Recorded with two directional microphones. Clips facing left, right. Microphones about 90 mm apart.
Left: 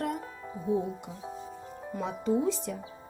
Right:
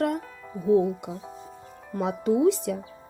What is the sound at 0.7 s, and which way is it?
Speech, 65° right (ahead or behind).